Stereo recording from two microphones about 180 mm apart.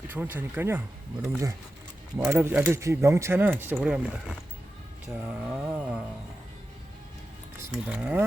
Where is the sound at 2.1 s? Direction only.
10° right (ahead or behind).